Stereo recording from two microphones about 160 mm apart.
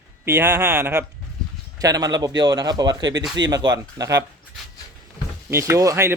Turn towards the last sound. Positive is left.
turn(degrees=-15)  # may be behind; listen again after turning